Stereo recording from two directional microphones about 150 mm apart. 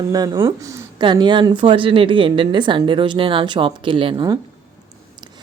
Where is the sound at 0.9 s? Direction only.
30° right (ahead or behind).